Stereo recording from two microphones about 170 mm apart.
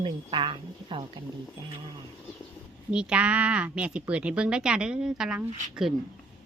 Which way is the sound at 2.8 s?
5° right (ahead or behind).